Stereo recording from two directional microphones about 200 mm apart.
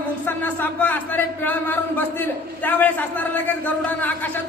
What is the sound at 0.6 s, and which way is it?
A man's voice, 10° left (ahead or behind).